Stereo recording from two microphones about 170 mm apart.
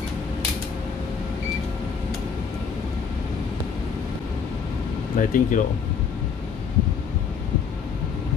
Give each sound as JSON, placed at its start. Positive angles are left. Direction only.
{"t": 5.1, "sound": "speech", "side_deg": 50}